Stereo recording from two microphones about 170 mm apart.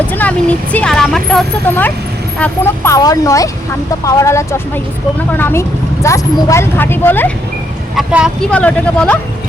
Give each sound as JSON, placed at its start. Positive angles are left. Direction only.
{"t": 0.1, "sound": "speech", "side_deg": 10}
{"t": 2.4, "sound": "speech", "side_deg": 15}
{"t": 7.9, "sound": "speech", "side_deg": -5}